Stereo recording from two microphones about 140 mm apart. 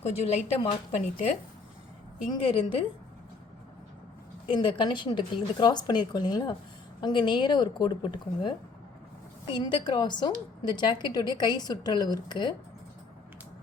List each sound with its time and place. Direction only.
0.0 s speech: 55° left (ahead or behind)
2.3 s speech: 40° left (ahead or behind)
4.4 s speech: 35° left (ahead or behind)